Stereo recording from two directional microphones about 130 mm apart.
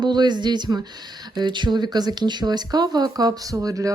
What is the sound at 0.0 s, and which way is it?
Speech, 35° right (ahead or behind).